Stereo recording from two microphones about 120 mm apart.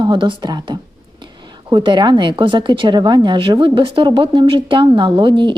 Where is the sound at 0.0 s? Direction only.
40° right (ahead or behind).